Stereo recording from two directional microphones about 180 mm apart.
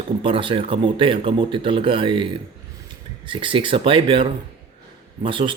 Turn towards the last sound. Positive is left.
turn(degrees=-30)  # may be behind; listen again after turning